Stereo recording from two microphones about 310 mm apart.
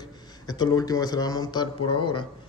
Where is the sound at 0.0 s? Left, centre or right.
Centre.